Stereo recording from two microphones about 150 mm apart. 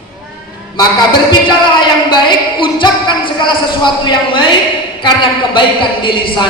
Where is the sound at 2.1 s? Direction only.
30° left (ahead or behind).